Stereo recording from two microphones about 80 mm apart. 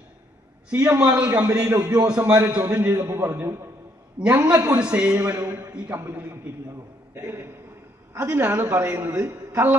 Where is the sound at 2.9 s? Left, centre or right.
Right.